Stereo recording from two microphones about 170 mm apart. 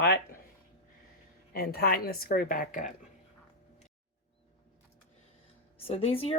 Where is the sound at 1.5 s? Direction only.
65° left (ahead or behind).